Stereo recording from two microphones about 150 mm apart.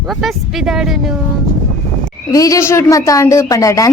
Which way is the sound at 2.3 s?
25° left (ahead or behind).